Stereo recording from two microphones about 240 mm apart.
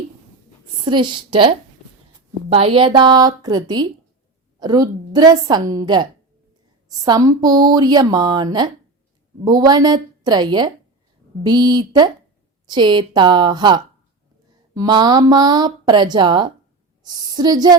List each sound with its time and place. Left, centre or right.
0.9 s a woman's voice: centre